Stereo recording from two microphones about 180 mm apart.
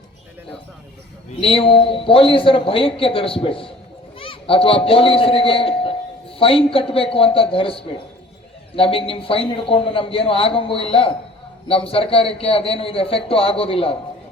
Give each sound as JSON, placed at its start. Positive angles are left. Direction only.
{"t": 1.4, "sound": "a man's voice", "side_deg": 30}